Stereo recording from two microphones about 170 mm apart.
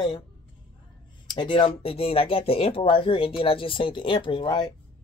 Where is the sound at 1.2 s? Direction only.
30° left (ahead or behind).